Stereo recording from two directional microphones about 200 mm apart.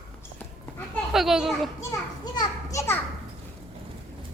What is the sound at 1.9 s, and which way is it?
Children playing, 20° left (ahead or behind).